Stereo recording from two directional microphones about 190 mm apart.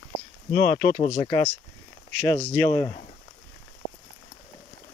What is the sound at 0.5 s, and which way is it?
Speech, 40° left (ahead or behind).